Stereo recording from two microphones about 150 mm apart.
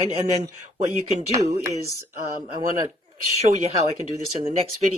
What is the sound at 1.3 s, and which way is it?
Speech, 20° right (ahead or behind).